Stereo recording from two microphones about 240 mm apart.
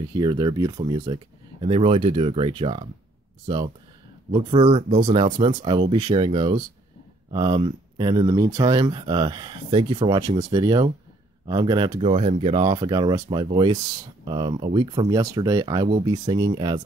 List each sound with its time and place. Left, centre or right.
0.1 s speech: centre